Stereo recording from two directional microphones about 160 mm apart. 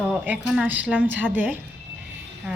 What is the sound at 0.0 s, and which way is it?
A woman's voice, 5° right (ahead or behind).